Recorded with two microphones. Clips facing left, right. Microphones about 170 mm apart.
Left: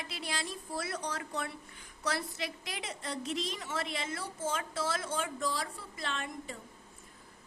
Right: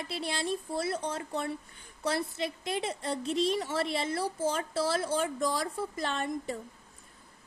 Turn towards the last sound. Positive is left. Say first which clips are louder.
# right 6 dB
turn(degrees=-40)  # may be behind; listen again after turning